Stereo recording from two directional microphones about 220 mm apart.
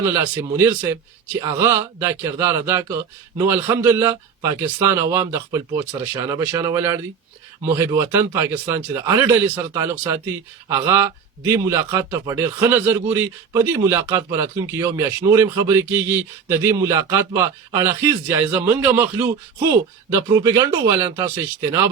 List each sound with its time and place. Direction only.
0.1 s speech: 10° right (ahead or behind)